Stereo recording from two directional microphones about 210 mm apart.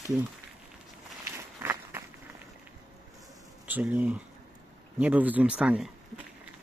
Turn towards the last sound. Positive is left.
turn(degrees=-5)  # may be behind; listen again after turning